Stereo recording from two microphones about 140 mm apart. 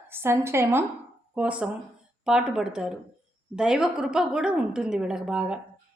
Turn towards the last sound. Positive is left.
turn(degrees=-5)  # may be behind; listen again after turning